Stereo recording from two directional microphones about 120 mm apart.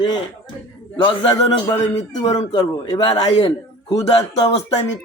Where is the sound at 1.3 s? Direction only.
30° left (ahead or behind).